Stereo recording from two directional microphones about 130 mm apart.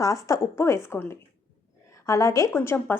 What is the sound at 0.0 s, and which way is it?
A woman's voice, 25° left (ahead or behind).